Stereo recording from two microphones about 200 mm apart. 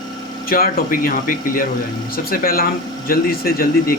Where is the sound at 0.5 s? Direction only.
45° left (ahead or behind).